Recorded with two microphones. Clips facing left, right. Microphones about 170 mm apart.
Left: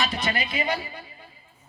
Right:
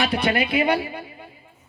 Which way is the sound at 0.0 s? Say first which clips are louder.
Right 6 dB; 60° right (ahead or behind).